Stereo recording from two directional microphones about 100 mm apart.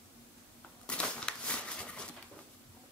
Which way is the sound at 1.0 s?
10° left (ahead or behind).